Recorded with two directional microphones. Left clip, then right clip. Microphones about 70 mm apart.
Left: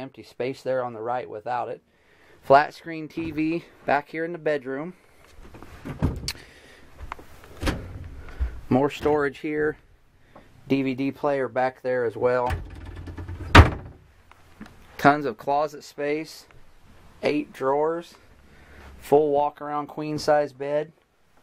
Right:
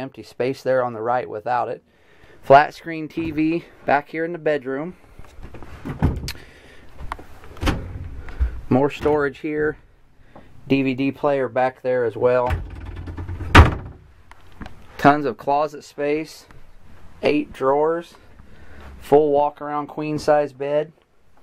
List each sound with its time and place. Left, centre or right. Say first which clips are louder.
0.0 s speech: right 6 dB; centre
2.4 s speech: right 5 dB; centre
6.1 s a sound: even; centre
8.4 s speech: right 3 dB; centre
10.3 s speech: right 4 dB; centre
14.6 s speech: right 3 dB; centre